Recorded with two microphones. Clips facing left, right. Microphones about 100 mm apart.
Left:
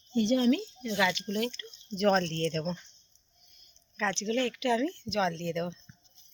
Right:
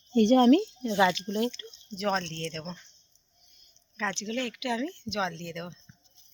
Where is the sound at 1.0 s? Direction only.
35° right (ahead or behind).